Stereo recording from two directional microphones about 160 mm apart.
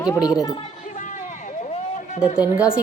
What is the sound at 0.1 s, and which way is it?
Speech, 25° left (ahead or behind).